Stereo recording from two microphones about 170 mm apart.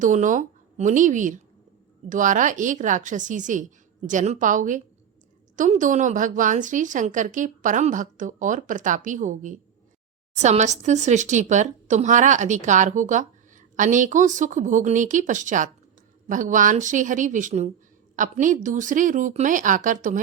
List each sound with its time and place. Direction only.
0.0 s speech: 50° right (ahead or behind)